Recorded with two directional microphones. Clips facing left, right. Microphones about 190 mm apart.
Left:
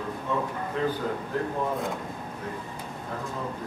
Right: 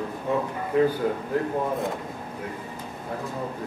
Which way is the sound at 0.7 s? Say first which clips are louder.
Right 8 dB; 10° right (ahead or behind).